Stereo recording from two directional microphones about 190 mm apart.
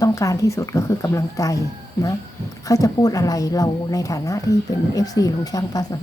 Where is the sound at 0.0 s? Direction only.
15° left (ahead or behind).